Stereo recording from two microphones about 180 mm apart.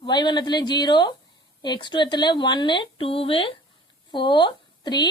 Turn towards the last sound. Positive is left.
turn(degrees=25)  # may be behind; listen again after turning